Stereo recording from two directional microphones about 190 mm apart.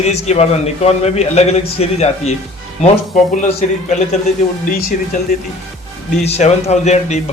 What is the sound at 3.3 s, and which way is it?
Speech, 40° left (ahead or behind).